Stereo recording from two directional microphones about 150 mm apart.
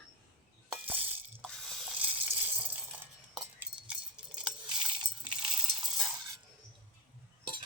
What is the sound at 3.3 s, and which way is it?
Chink, 5° right (ahead or behind).